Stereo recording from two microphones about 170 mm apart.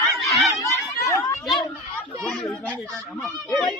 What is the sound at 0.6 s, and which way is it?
Chatter, 20° left (ahead or behind).